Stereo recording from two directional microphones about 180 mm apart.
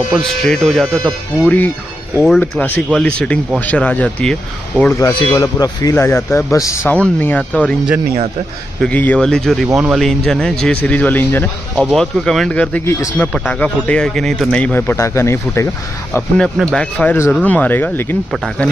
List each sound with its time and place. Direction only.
0.1 s speech: centre (ahead or behind)
4.9 s speech: 15° left (ahead or behind)
8.8 s speech: 10° left (ahead or behind)
18.3 s speech: centre (ahead or behind)